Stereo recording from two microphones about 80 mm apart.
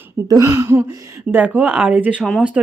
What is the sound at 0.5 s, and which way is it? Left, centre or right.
Speech, right.